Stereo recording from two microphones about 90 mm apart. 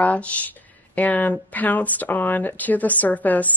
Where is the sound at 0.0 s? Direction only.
15° left (ahead or behind).